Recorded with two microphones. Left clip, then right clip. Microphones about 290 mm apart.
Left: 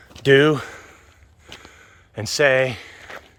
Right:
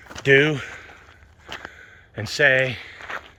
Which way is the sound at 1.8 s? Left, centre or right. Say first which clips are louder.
Left 2 dB; centre.